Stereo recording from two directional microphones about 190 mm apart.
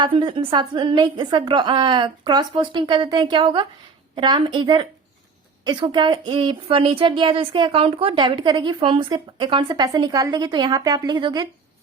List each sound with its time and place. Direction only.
0.0 s speech: 25° right (ahead or behind)